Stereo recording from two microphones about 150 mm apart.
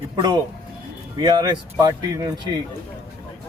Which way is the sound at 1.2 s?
30° right (ahead or behind).